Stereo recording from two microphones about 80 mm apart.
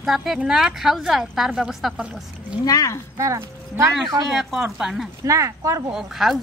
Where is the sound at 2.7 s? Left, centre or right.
Left.